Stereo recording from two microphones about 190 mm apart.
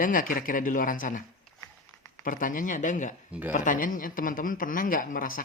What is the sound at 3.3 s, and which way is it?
Speech, 10° right (ahead or behind).